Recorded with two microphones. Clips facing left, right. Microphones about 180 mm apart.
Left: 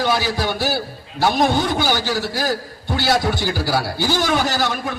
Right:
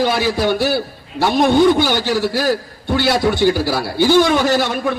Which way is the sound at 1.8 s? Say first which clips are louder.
Right 4 dB; 60° right (ahead or behind).